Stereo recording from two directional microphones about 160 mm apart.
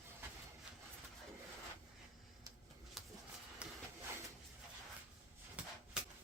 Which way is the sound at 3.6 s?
5° right (ahead or behind).